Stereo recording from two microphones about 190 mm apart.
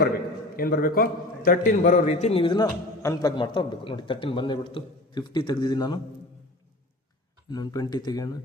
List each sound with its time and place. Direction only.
0.5 s a man's voice: 50° left (ahead or behind); by 6.0 s 20° left (ahead or behind)
7.5 s a man's voice: 20° left (ahead or behind)